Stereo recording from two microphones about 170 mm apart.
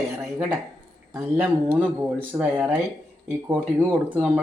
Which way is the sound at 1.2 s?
15° right (ahead or behind).